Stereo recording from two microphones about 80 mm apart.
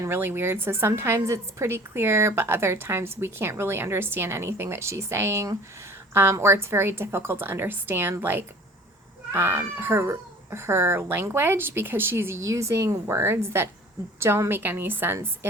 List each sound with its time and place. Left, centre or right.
0.0 s a woman's voice: right